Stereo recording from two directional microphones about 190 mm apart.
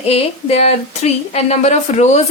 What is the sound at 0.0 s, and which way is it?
A woman's voice, 30° left (ahead or behind).